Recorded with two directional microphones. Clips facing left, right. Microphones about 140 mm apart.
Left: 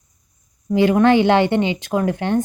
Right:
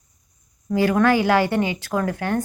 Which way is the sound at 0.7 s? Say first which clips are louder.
Left 4 dB; 20° left (ahead or behind).